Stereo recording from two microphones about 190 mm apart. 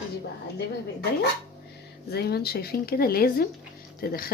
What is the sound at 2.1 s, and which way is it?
Speech, 55° left (ahead or behind).